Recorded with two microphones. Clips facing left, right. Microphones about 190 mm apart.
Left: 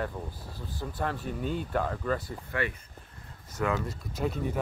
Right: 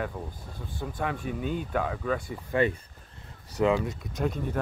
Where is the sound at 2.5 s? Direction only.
25° right (ahead or behind).